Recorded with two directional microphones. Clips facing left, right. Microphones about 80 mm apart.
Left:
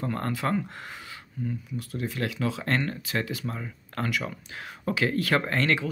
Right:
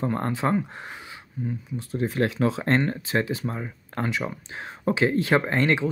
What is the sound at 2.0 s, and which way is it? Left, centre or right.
Speech, right.